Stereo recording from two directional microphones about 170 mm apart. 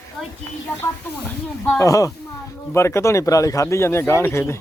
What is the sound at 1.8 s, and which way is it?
Speech, 20° left (ahead or behind).